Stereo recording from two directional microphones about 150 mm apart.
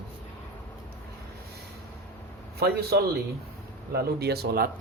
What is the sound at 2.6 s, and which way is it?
Speech, 90° right.